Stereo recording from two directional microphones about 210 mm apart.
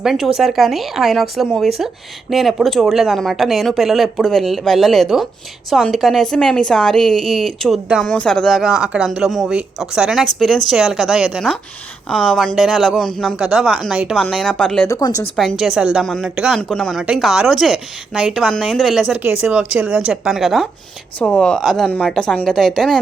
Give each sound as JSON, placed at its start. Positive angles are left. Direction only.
{"t": 0.0, "sound": "a woman's voice", "side_deg": 0}
{"t": 14.8, "sound": "speech", "side_deg": 15}
{"t": 15.4, "sound": "a woman's voice", "side_deg": 0}